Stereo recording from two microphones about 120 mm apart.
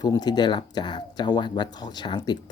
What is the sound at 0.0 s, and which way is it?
Speech, 35° left (ahead or behind).